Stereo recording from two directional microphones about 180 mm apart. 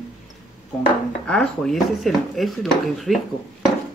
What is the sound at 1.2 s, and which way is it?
Speech, 5° left (ahead or behind).